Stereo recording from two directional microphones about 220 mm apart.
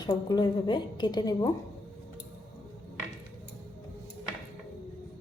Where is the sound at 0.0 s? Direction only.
20° left (ahead or behind).